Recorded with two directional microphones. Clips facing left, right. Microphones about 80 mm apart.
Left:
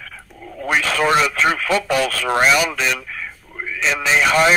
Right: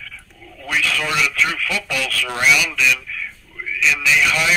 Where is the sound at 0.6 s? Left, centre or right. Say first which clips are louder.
Left 4 dB; left.